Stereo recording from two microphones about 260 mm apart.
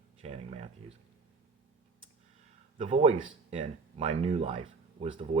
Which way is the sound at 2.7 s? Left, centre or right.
Right.